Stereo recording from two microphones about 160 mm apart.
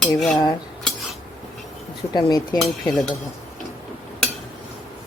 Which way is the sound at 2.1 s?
25° left (ahead or behind).